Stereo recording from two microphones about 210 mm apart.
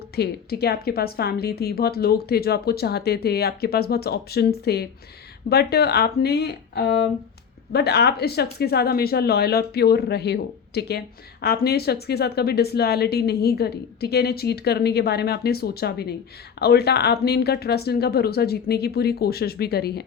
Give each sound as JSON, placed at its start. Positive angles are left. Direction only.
{"t": 0.2, "sound": "speech", "side_deg": 50}